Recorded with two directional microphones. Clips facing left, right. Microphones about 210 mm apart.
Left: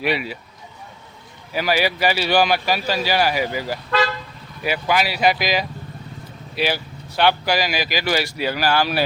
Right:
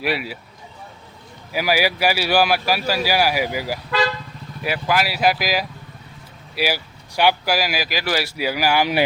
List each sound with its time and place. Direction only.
0.0 s speech: 5° right (ahead or behind)
1.5 s speech: 10° right (ahead or behind)